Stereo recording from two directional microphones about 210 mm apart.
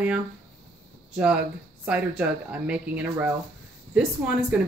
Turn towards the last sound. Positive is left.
turn(degrees=-5)  # may be behind; listen again after turning